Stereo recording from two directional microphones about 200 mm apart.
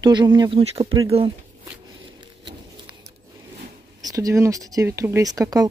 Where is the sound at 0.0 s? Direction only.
20° right (ahead or behind).